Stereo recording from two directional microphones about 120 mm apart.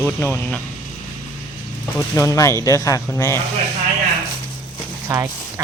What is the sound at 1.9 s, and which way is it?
Speech, 25° left (ahead or behind).